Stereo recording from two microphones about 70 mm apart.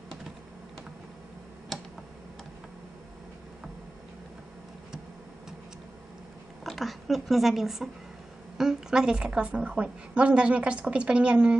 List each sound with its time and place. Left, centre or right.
1.7 s computer keyboard: centre
6.6 s a woman's voice: centre